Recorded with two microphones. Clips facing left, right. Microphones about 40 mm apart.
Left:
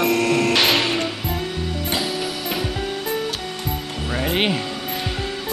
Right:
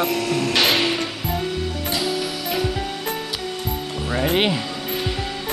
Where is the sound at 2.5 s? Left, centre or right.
Centre.